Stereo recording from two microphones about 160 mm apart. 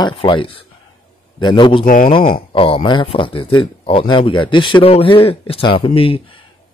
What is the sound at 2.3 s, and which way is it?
Speech, 35° left (ahead or behind).